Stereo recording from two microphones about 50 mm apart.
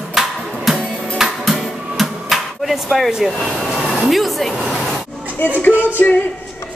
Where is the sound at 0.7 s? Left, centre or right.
Centre.